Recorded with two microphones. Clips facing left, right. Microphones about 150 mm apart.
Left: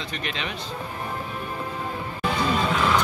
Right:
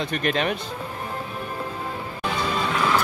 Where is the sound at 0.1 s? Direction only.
50° right (ahead or behind).